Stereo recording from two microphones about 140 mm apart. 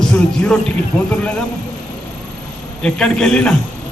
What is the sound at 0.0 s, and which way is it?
A man's voice, 10° left (ahead or behind).